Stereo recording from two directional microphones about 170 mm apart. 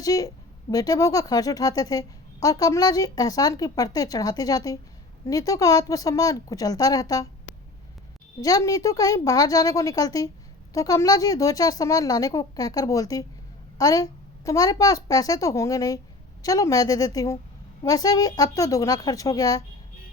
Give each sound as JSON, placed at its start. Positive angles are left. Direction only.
{"t": 0.0, "sound": "speech", "side_deg": 20}
{"t": 8.4, "sound": "speech", "side_deg": 20}